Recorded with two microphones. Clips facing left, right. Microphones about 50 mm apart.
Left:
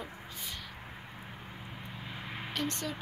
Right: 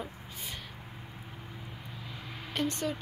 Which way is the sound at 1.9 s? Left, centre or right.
Left.